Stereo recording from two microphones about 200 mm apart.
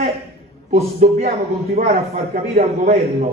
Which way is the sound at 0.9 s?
45° right (ahead or behind).